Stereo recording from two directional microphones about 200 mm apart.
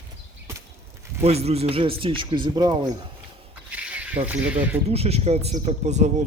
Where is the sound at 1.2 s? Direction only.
30° right (ahead or behind).